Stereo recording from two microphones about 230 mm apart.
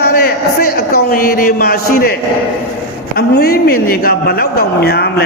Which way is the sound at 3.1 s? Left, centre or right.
Left.